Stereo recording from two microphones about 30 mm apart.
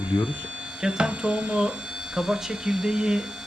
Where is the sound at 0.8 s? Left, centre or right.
Right.